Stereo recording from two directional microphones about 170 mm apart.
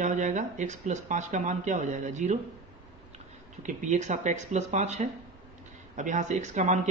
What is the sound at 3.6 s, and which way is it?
Speech, 45° right (ahead or behind).